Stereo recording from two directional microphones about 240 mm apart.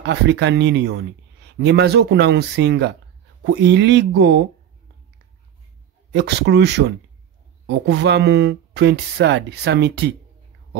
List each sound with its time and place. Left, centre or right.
0.0 s speech: right
6.1 s speech: right